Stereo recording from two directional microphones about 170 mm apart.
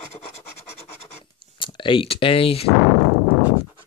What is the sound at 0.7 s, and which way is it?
Scratch, 35° left (ahead or behind).